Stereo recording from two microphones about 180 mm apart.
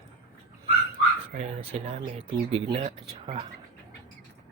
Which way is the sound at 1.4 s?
35° right (ahead or behind).